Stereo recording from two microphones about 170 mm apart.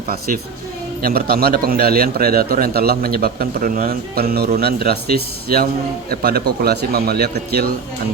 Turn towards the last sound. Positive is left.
turn(degrees=-65)  # may be behind; listen again after turning